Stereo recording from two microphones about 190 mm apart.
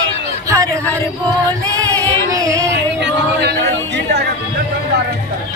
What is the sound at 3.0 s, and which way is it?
Music, 60° right (ahead or behind).